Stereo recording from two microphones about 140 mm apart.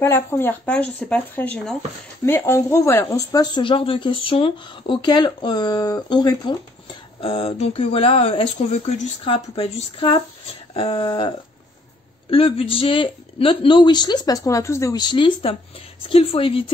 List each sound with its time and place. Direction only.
0.0 s speech: 15° left (ahead or behind)
3.6 s speech: 40° left (ahead or behind); by 9.1 s 55° left (ahead or behind)
9.2 s speech: 45° left (ahead or behind)